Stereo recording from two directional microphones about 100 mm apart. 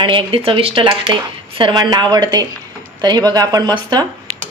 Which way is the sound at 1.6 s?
45° right (ahead or behind).